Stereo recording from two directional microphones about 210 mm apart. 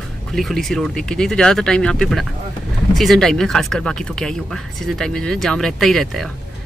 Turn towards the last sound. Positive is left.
turn(degrees=0)  # may be behind; listen again after turning